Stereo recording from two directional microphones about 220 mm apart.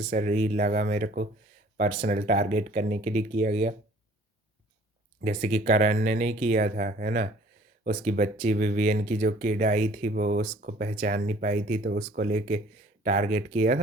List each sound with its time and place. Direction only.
0.1 s speech: 35° right (ahead or behind)
5.2 s speech: 35° right (ahead or behind)